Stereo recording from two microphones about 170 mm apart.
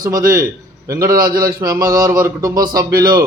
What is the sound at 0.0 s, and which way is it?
A man's voice, 55° right (ahead or behind).